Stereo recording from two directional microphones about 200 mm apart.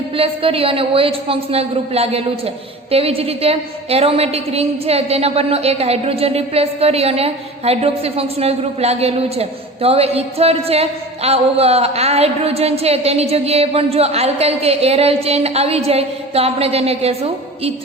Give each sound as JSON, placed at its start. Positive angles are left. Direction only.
{"t": 0.2, "sound": "a woman's voice", "side_deg": -30}